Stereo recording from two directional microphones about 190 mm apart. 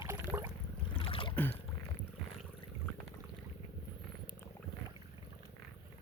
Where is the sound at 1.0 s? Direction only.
30° left (ahead or behind).